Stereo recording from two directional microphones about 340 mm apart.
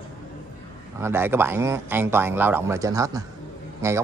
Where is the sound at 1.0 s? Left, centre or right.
Centre.